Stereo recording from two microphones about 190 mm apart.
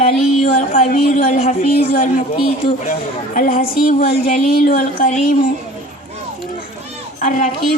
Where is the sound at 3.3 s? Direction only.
45° left (ahead or behind).